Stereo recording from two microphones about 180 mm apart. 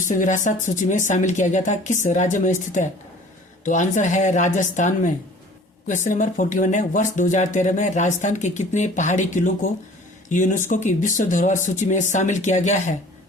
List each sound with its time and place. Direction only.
0.1 s speech: 45° left (ahead or behind)